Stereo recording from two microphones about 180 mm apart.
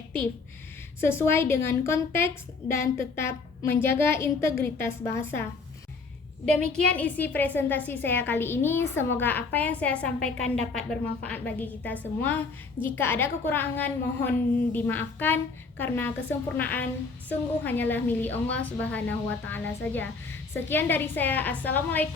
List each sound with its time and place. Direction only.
1.0 s a woman's voice: 15° left (ahead or behind)
6.5 s a woman's voice: 5° left (ahead or behind)